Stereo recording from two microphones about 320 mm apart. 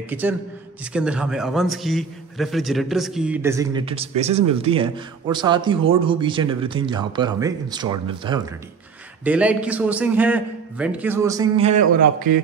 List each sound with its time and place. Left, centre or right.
0.1 s a man's voice: centre
11.7 s a man's voice: right